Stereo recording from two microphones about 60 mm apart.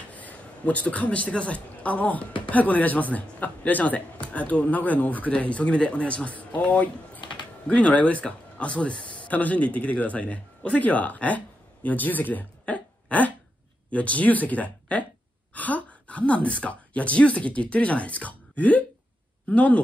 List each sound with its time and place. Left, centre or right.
0.1 s a woman's voice: left